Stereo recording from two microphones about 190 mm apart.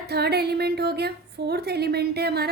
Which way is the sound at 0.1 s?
55° right (ahead or behind).